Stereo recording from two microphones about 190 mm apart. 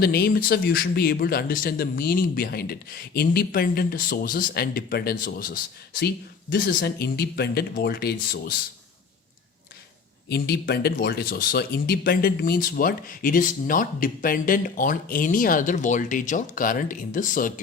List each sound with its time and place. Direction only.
0.0 s speech: 55° left (ahead or behind)
10.2 s speech: 60° left (ahead or behind); by 17.5 s 45° left (ahead or behind)